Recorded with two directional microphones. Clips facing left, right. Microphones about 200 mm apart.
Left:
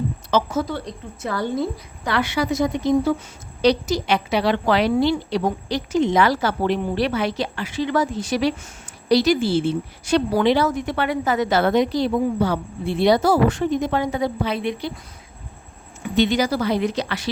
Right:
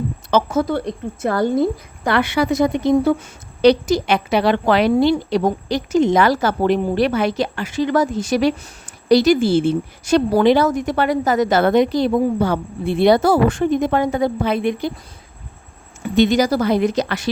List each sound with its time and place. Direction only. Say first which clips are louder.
0.3 s a woman's voice: right 4 dB; 55° right (ahead or behind)
16.1 s a woman's voice: right 4 dB; 45° right (ahead or behind)